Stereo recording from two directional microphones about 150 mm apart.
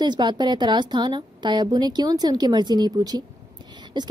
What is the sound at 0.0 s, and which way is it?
A woman's voice, 30° right (ahead or behind).